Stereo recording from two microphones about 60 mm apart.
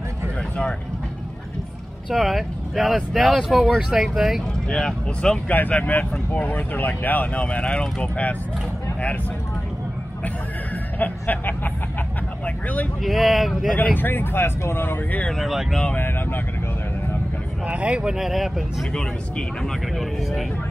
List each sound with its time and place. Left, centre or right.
2.0 s speech: centre
3.5 s speech: centre
4.6 s speech: centre
5.5 s speech: left
11.0 s speech: left
13.0 s speech: centre
13.7 s speech: left
15.2 s speech: centre
17.6 s speech: right
18.1 s speech: centre